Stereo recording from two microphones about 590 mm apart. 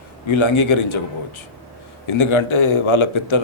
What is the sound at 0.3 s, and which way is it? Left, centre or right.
Speech, left.